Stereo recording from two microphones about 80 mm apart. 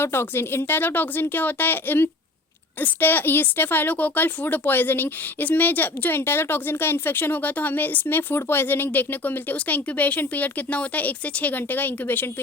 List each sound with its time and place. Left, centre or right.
0.0 s speech: left